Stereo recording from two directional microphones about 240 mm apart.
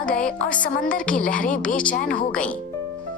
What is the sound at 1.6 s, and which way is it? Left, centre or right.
Speech, centre.